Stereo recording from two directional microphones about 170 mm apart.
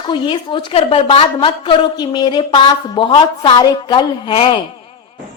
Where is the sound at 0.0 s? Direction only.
30° left (ahead or behind).